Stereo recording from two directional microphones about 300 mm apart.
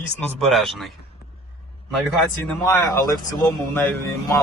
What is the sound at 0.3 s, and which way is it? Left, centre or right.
Speech, centre.